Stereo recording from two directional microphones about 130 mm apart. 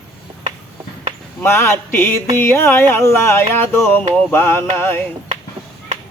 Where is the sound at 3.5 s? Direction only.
15° left (ahead or behind).